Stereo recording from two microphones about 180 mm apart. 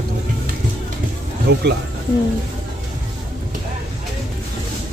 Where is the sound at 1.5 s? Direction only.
70° right (ahead or behind).